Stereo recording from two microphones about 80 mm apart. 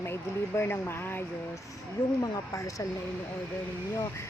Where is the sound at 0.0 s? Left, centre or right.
Left.